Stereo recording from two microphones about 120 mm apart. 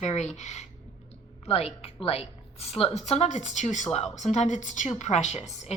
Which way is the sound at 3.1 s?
75° left (ahead or behind).